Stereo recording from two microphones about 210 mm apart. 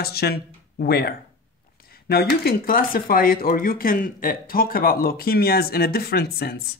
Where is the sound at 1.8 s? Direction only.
45° left (ahead or behind).